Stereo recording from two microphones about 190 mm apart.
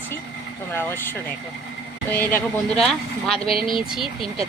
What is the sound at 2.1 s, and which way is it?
Speech, 10° left (ahead or behind).